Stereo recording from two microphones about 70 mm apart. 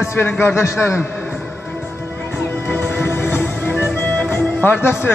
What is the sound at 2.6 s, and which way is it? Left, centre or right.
Music, left.